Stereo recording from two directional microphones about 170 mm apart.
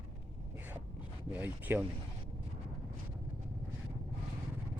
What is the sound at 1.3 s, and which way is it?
Speech, 10° right (ahead or behind).